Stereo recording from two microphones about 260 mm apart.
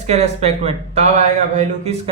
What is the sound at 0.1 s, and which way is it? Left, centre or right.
Speech, right.